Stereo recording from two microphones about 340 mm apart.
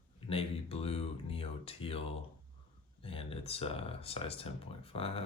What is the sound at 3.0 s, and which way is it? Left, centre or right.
Speech, centre.